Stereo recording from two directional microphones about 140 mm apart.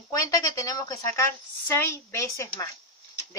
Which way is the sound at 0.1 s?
25° left (ahead or behind).